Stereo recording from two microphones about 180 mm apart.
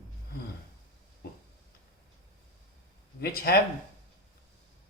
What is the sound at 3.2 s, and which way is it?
Speech, 55° left (ahead or behind).